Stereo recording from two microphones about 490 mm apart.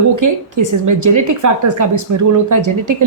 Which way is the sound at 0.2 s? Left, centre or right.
Right.